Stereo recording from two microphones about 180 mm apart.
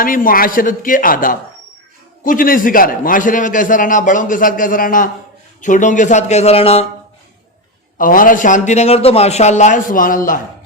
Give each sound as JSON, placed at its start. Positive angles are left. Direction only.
{"t": 0.0, "sound": "a man's voice", "side_deg": 50}
{"t": 7.9, "sound": "a man's voice", "side_deg": 50}